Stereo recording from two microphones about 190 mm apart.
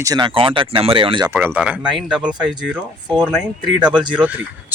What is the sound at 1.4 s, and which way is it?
Speech, 5° right (ahead or behind).